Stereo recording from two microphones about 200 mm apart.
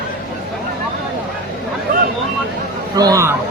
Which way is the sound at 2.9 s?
15° right (ahead or behind).